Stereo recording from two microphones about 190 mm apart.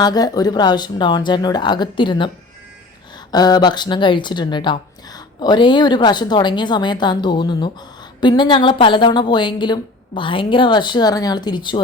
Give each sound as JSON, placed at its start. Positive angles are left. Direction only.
{"t": 0.0, "sound": "speech", "side_deg": 20}
{"t": 3.3, "sound": "speech", "side_deg": 20}